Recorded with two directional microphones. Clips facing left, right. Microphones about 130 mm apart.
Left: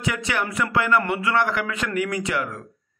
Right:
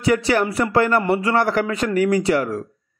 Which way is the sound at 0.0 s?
35° right (ahead or behind).